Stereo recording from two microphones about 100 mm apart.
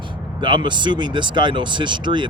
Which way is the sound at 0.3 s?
50° right (ahead or behind).